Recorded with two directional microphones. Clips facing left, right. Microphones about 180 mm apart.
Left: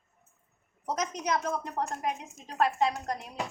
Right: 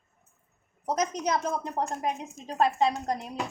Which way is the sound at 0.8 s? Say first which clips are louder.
Right 4 dB; 35° right (ahead or behind).